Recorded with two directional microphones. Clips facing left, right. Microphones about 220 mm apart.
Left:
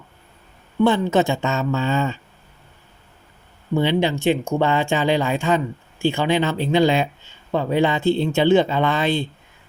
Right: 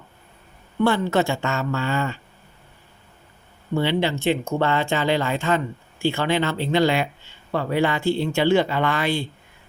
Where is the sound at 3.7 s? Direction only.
15° left (ahead or behind).